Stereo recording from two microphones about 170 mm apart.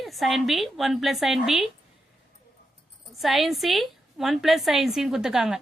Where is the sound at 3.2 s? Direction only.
Centre (ahead or behind).